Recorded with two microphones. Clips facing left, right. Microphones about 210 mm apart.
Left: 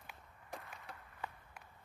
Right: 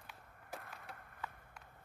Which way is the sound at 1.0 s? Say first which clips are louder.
Left 1 dB; 50° right (ahead or behind).